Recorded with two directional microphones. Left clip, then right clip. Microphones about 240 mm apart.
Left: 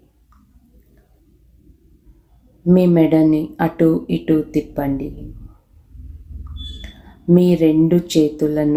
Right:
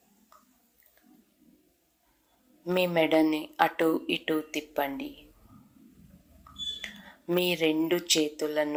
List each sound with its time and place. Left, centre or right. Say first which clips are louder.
2.6 s speech: left 11 dB; right
6.8 s speech: left 13 dB; right